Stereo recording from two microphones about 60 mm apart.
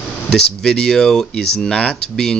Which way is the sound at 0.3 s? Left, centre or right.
Centre.